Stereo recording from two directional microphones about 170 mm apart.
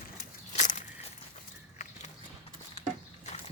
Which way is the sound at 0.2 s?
45° left (ahead or behind).